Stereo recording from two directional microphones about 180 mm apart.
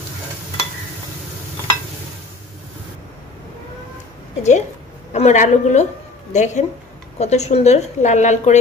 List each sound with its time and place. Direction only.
4.4 s a woman's voice: 40° left (ahead or behind)